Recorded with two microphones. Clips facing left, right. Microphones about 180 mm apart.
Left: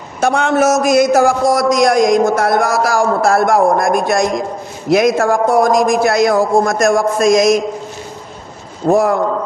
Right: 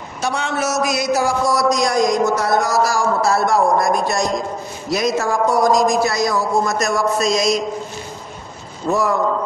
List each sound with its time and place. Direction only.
0.2 s a man's voice: 50° left (ahead or behind)
8.8 s speech: 55° left (ahead or behind)